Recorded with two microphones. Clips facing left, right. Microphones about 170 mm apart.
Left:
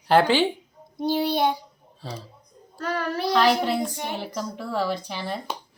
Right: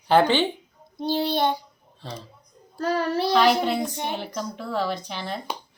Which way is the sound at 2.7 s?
30° right (ahead or behind).